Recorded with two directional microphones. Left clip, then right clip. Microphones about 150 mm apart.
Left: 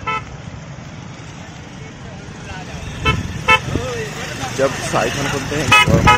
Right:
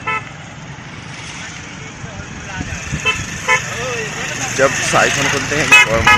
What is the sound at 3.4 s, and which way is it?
Vehicle, 25° left (ahead or behind).